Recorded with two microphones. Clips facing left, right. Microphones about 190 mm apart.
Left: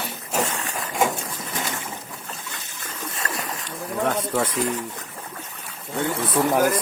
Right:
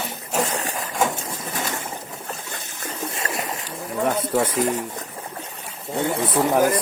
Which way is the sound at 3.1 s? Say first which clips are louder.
Even; 25° right (ahead or behind).